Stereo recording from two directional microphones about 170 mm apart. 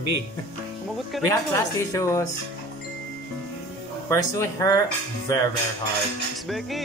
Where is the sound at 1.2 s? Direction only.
20° left (ahead or behind).